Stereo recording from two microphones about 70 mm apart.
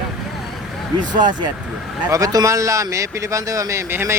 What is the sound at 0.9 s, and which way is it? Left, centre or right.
Speech, right.